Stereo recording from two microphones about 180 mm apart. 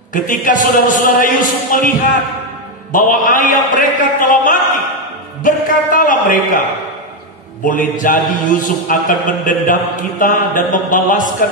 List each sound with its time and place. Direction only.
0.1 s a man's voice: 50° left (ahead or behind)
2.9 s a man's voice: 50° left (ahead or behind)
7.6 s a man's voice: 50° left (ahead or behind)